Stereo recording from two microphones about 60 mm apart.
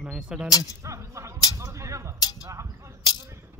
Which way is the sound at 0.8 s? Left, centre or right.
Right.